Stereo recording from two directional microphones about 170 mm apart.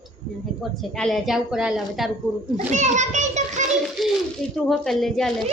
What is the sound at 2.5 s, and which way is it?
A child's voice, 45° right (ahead or behind).